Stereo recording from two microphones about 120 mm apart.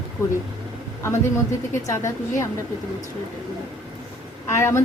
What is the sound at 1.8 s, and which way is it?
Speech, 25° left (ahead or behind).